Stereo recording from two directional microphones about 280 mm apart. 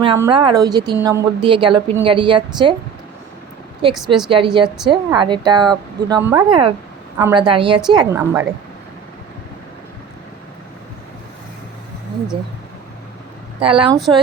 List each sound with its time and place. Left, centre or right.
0.0 s a woman's voice: centre
3.9 s a woman's voice: centre
4.3 s a woman's voice: centre
13.6 s a woman's voice: centre